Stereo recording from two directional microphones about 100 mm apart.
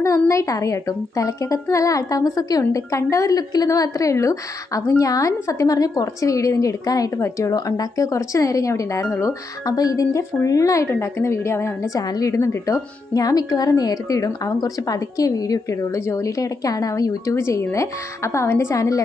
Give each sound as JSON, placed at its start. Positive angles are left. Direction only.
{"t": 0.0, "sound": "a woman's voice", "side_deg": 30}
{"t": 9.0, "sound": "speech", "side_deg": 20}
{"t": 9.7, "sound": "a woman's voice", "side_deg": 35}